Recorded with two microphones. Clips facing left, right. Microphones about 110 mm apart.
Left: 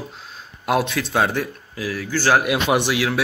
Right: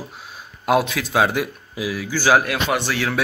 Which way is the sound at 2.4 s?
15° left (ahead or behind).